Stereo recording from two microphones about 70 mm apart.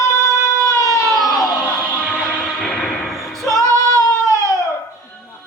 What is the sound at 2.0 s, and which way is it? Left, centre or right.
Music, centre.